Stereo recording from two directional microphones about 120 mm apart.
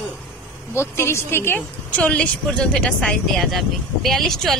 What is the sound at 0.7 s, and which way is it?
A woman's voice, 20° left (ahead or behind).